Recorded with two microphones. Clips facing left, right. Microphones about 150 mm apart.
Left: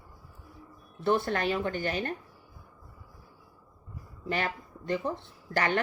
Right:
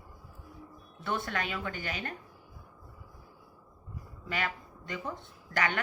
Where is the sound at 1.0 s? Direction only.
35° left (ahead or behind).